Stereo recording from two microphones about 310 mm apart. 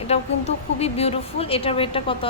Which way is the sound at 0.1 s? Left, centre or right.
Centre.